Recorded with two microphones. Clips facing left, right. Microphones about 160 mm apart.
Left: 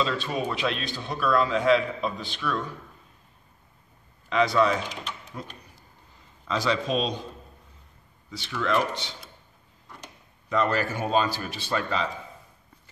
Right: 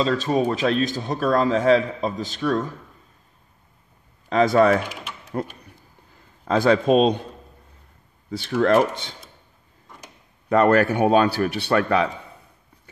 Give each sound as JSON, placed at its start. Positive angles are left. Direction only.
{"t": 0.0, "sound": "speech", "side_deg": -40}
{"t": 4.3, "sound": "a man's voice", "side_deg": -45}
{"t": 8.3, "sound": "a man's voice", "side_deg": -50}
{"t": 10.5, "sound": "a man's voice", "side_deg": -55}